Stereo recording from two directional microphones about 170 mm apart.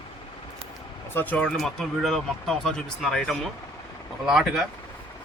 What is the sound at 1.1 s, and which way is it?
Speech, 10° left (ahead or behind).